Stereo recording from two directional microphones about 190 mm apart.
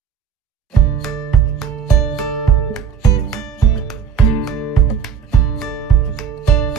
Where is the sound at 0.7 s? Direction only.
Centre (ahead or behind).